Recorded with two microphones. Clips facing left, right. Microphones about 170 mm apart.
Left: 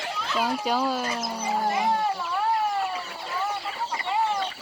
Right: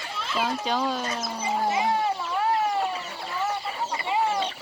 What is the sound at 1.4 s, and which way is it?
Speech, 5° right (ahead or behind).